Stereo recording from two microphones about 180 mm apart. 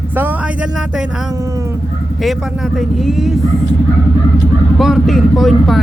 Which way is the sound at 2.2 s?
Centre (ahead or behind).